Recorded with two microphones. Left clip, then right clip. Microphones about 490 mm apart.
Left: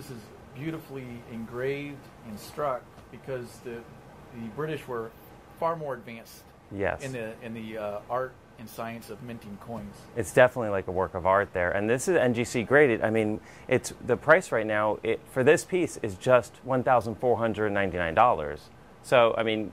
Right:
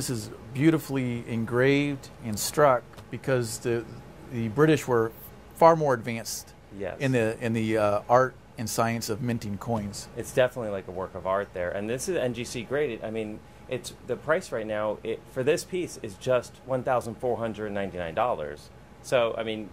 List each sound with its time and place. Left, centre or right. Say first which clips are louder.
0.6 s speech: right 13 dB; right
10.1 s speech: left 4 dB; left